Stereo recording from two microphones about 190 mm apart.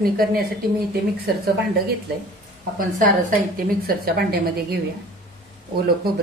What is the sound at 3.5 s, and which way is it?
A woman's voice, 55° right (ahead or behind).